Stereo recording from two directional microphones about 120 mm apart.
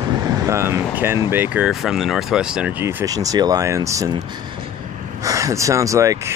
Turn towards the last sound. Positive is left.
turn(degrees=-25)  # may be behind; listen again after turning